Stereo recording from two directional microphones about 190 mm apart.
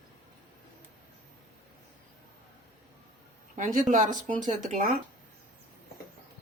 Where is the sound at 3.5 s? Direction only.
40° right (ahead or behind).